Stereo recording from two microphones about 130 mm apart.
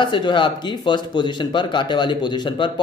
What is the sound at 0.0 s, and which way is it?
Speech, 40° left (ahead or behind).